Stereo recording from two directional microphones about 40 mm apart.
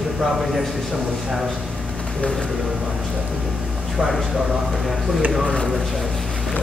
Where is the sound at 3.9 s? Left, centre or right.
Centre.